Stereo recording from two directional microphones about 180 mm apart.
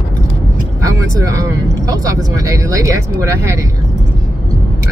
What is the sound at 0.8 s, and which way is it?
Speech, 20° right (ahead or behind).